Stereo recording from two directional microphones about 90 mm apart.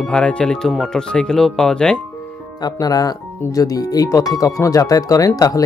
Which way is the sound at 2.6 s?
45° left (ahead or behind).